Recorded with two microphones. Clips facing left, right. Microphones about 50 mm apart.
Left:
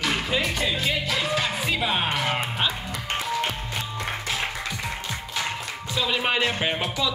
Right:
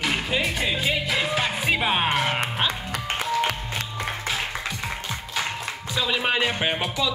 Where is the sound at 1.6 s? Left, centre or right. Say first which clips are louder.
Right 2 dB; right.